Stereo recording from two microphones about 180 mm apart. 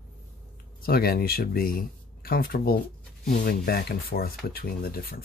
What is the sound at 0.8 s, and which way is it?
Speech, 55° left (ahead or behind).